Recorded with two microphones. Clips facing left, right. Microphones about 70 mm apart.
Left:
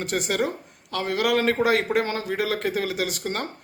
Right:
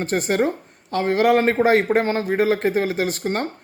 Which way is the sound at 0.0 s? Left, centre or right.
Right.